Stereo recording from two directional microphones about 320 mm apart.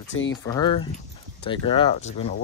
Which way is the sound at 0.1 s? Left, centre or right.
Left.